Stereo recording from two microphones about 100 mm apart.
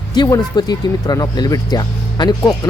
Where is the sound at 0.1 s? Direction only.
45° left (ahead or behind).